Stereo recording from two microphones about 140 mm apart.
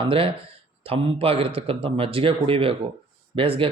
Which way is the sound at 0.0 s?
40° right (ahead or behind).